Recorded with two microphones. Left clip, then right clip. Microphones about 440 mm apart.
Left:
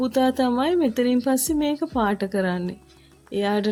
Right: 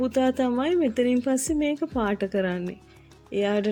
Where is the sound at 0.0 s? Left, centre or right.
Left.